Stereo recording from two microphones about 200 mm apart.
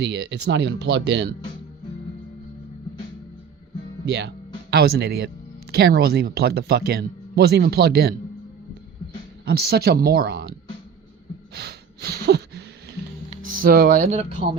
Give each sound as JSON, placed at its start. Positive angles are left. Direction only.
{"t": 0.0, "sound": "speech", "side_deg": -60}
{"t": 4.0, "sound": "speech", "side_deg": -60}
{"t": 9.4, "sound": "speech", "side_deg": -55}
{"t": 11.5, "sound": "a sound", "side_deg": -55}
{"t": 13.3, "sound": "speech", "side_deg": -40}